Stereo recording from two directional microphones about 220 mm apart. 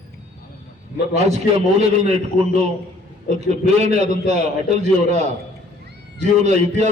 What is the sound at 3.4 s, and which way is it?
A man's voice, 30° right (ahead or behind).